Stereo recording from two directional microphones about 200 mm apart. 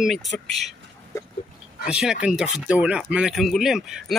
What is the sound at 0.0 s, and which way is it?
Speech, centre (ahead or behind).